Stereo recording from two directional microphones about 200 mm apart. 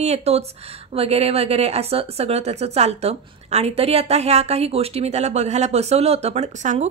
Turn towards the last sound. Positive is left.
turn(degrees=-35)  # may be behind; listen again after turning